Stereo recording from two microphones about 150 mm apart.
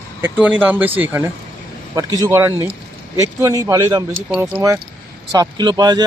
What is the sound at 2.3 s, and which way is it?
Speech, 15° right (ahead or behind).